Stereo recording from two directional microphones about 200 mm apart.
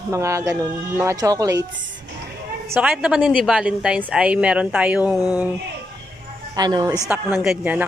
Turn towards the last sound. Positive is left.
turn(degrees=-5)  # may be behind; listen again after turning